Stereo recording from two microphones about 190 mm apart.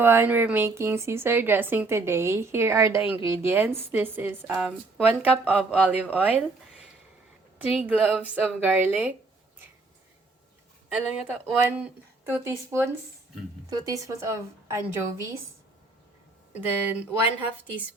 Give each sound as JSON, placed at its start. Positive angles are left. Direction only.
{"t": 0.0, "sound": "a woman's voice", "side_deg": -10}
{"t": 7.6, "sound": "a woman's voice", "side_deg": -10}
{"t": 10.8, "sound": "a woman's voice", "side_deg": -5}
{"t": 16.6, "sound": "a woman's voice", "side_deg": -10}